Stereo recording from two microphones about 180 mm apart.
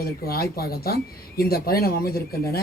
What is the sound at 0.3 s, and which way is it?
Speech, 60° left (ahead or behind).